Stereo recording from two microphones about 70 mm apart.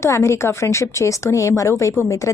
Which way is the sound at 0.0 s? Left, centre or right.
Left.